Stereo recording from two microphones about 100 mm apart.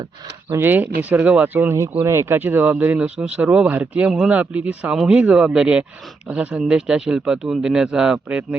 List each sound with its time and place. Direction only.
0.5 s speech: 20° right (ahead or behind)
1.9 s speech: 25° right (ahead or behind); by 8.4 s 10° right (ahead or behind)